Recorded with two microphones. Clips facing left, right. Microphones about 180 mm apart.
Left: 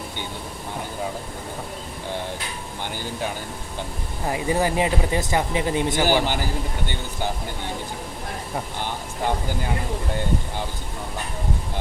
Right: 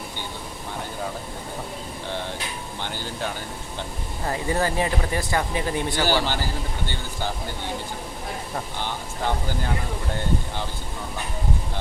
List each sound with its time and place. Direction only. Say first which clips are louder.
4.3 s speech: left 2 dB; 15° left (ahead or behind)
8.5 s speech: left 3 dB; 10° left (ahead or behind)